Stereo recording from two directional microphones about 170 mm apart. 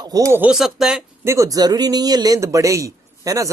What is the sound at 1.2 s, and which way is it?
Speech, 15° right (ahead or behind).